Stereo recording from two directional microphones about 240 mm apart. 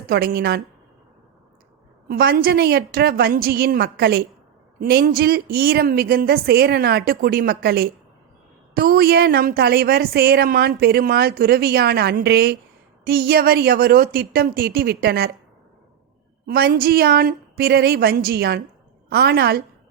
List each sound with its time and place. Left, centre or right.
0.1 s a woman's voice: right
2.0 s a woman's voice: right
16.5 s a woman's voice: right